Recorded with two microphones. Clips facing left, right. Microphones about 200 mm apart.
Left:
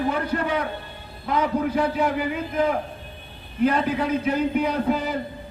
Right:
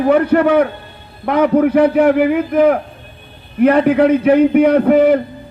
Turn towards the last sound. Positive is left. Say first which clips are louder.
# right 14 dB
turn(degrees=-65)  # may be behind; listen again after turning